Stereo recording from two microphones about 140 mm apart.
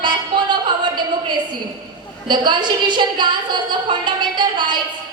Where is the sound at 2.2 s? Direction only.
30° right (ahead or behind).